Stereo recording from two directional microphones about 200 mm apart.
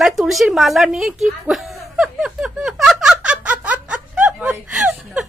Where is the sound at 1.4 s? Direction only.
5° right (ahead or behind).